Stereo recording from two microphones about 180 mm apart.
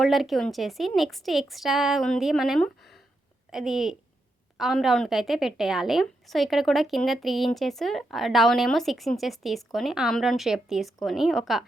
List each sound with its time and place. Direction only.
0.0 s a woman's voice: centre (ahead or behind)